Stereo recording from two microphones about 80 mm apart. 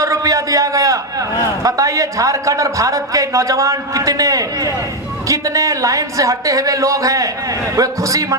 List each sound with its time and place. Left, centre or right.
0.0 s a man's voice: right